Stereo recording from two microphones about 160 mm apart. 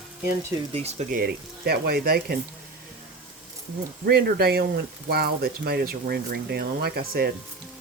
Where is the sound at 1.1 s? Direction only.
75° right (ahead or behind).